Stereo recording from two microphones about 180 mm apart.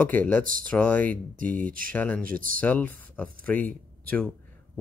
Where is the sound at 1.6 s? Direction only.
50° right (ahead or behind).